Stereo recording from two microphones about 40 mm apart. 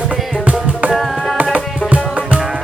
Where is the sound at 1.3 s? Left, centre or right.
Right.